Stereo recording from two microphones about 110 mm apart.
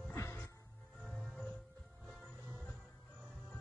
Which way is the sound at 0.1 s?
25° left (ahead or behind).